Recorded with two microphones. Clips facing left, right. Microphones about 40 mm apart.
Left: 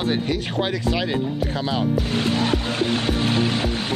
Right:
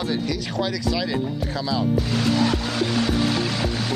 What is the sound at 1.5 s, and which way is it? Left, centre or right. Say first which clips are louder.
Music: right 2 dB; left.